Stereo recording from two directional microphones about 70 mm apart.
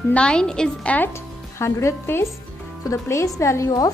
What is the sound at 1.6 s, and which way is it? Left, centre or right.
A woman's voice, left.